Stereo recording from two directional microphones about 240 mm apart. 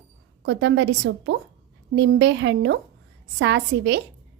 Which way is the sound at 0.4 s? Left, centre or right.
Right.